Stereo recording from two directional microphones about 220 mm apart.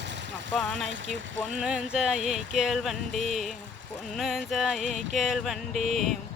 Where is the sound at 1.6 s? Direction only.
5° right (ahead or behind).